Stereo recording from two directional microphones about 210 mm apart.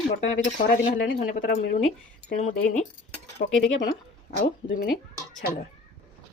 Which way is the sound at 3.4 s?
50° left (ahead or behind).